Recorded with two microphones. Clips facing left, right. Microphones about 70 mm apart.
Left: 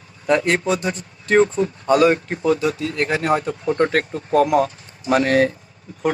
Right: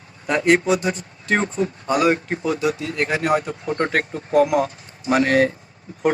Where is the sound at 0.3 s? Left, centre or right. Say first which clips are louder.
Right 1 dB; centre.